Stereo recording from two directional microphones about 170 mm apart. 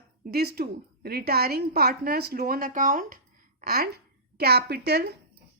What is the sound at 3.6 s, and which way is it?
A woman's voice, 65° right (ahead or behind).